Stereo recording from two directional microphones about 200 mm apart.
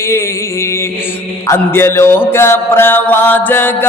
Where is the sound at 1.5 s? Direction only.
15° left (ahead or behind).